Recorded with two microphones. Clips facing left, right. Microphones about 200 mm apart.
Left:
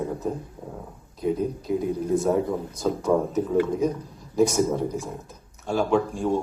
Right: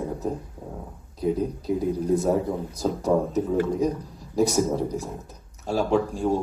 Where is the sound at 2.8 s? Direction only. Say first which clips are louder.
Even; 35° right (ahead or behind).